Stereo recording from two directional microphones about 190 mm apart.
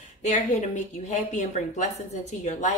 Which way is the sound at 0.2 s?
40° left (ahead or behind).